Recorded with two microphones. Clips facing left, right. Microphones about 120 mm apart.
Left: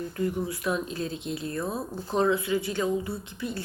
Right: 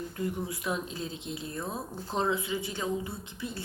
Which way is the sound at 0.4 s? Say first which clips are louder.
Left 4 dB; 20° right (ahead or behind).